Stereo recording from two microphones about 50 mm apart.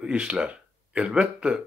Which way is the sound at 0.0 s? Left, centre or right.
Right.